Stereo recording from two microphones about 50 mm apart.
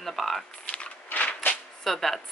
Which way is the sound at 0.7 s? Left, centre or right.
Left.